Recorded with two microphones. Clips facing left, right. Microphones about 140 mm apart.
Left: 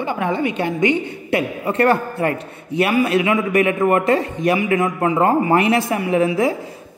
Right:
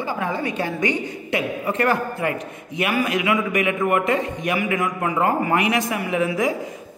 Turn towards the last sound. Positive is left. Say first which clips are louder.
# left 5 dB
turn(degrees=35)  # may be behind; listen again after turning